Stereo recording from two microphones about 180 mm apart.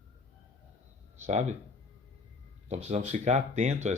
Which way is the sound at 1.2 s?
40° right (ahead or behind).